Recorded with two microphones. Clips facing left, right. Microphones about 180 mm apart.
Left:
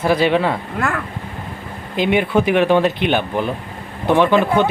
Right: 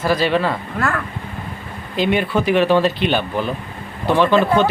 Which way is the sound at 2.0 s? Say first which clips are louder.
Left 2 dB; 15° left (ahead or behind).